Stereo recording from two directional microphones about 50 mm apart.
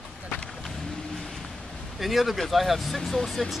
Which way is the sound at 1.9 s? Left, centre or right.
Centre.